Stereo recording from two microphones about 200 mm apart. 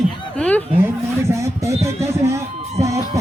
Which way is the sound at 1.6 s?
15° right (ahead or behind).